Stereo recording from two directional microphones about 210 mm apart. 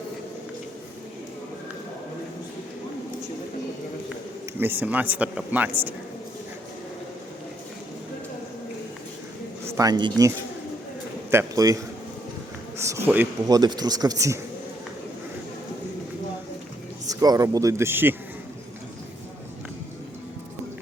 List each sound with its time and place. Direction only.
4.5 s speech: 10° right (ahead or behind)
9.6 s speech: 15° right (ahead or behind)
17.1 s speech: 15° right (ahead or behind)